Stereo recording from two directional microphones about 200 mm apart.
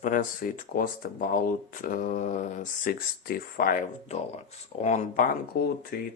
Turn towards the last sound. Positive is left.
turn(degrees=50)  # may be behind; listen again after turning